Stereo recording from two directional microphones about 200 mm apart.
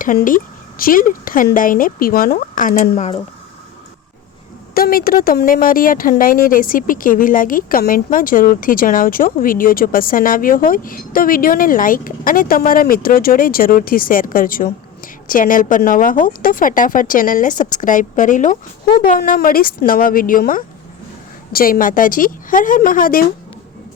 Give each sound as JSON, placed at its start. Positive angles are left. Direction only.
{"t": 0.0, "sound": "a woman's voice", "side_deg": 45}
{"t": 4.7, "sound": "a woman's voice", "side_deg": 45}